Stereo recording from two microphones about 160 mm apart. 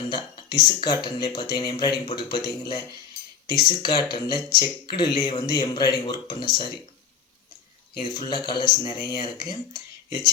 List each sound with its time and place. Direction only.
0.1 s speech: 30° left (ahead or behind)
8.1 s speech: 25° left (ahead or behind)